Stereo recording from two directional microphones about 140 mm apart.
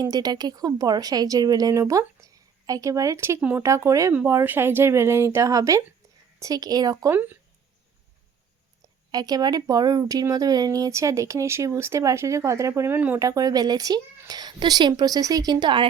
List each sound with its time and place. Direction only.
0.0 s speech: 30° right (ahead or behind)
4.1 s speech: 10° right (ahead or behind); by 7.1 s 25° right (ahead or behind)
7.1 s speech: 15° right (ahead or behind)
9.1 s speech: 30° right (ahead or behind)
13.1 s speech: 25° right (ahead or behind)